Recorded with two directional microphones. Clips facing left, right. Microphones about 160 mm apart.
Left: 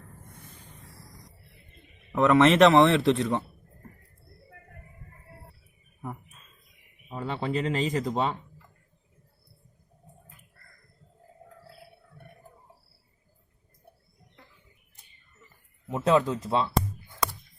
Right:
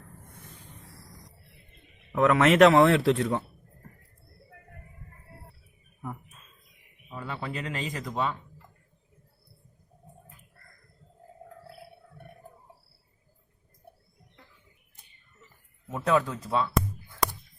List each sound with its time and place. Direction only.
2.1 s speech: 5° right (ahead or behind)
7.1 s speech: 25° left (ahead or behind)
15.9 s speech: 20° left (ahead or behind)